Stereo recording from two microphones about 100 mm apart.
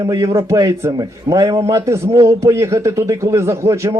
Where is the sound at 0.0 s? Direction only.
35° right (ahead or behind).